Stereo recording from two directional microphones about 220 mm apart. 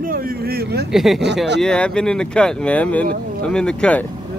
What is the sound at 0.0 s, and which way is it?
Speech, 40° right (ahead or behind).